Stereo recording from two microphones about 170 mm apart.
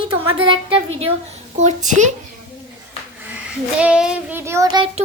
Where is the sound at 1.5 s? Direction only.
45° right (ahead or behind).